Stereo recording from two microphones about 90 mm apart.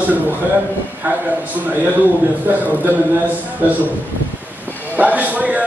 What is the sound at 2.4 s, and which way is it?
Speech, 20° right (ahead or behind).